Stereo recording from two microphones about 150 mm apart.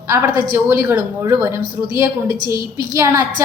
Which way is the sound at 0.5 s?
15° right (ahead or behind).